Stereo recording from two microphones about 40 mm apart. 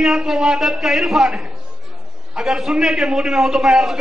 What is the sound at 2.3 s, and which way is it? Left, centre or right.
A man's voice, centre.